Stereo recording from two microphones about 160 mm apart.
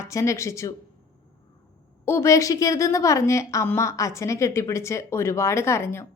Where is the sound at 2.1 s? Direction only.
15° left (ahead or behind).